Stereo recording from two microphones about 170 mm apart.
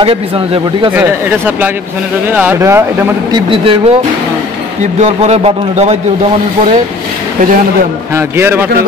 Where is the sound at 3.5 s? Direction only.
35° right (ahead or behind).